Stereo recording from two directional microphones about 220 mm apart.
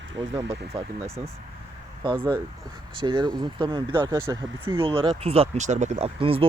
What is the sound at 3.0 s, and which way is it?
Speech, 20° right (ahead or behind).